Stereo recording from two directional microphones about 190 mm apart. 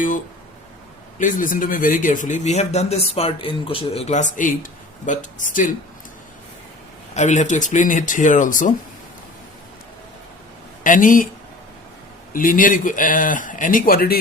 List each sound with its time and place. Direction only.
1.2 s speech: 45° left (ahead or behind)
7.1 s speech: 40° left (ahead or behind)
10.8 s speech: 45° left (ahead or behind)
12.3 s speech: 45° left (ahead or behind)